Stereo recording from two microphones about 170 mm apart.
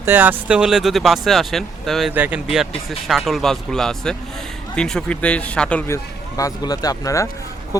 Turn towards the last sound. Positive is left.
turn(degrees=20)  # may be behind; listen again after turning